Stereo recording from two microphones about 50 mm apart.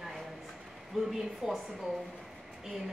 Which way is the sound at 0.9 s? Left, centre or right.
Centre.